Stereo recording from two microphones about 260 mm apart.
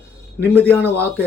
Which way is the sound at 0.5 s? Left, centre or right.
Centre.